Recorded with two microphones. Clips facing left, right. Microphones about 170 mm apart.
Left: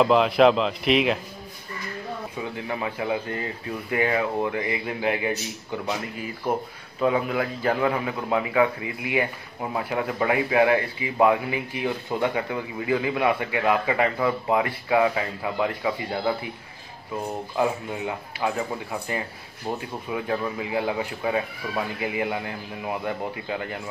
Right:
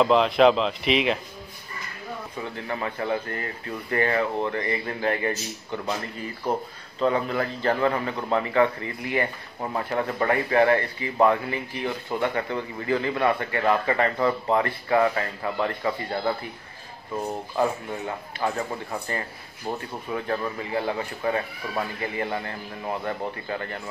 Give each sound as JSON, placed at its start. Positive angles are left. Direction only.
{"t": 0.0, "sound": "speech", "side_deg": 0}
{"t": 2.3, "sound": "a man's voice", "side_deg": 10}
{"t": 17.6, "sound": "a man's voice", "side_deg": 5}